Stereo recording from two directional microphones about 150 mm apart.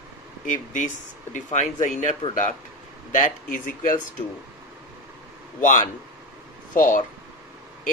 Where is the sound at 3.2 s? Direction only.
60° left (ahead or behind).